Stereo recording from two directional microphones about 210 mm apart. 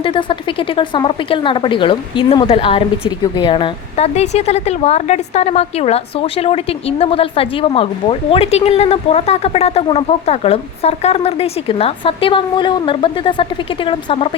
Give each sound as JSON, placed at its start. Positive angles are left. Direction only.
{"t": 0.0, "sound": "speech", "side_deg": 25}